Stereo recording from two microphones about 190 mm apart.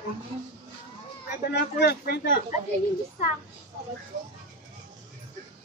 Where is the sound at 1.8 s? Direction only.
55° left (ahead or behind).